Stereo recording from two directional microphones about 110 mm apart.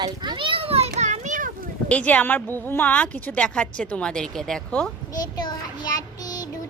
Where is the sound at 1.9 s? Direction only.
10° left (ahead or behind).